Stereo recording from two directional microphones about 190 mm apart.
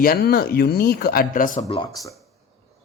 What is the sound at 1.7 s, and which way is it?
Speech, 20° left (ahead or behind).